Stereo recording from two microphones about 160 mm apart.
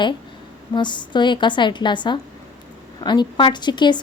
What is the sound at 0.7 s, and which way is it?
Speech, 30° left (ahead or behind).